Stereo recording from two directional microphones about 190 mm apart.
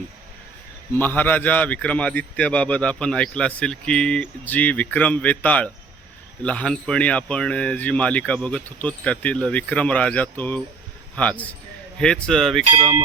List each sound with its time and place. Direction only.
0.9 s a man's voice: 10° left (ahead or behind)
12.7 s cowbell: 20° right (ahead or behind)